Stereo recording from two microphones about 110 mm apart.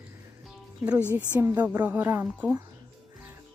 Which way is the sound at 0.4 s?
10° right (ahead or behind).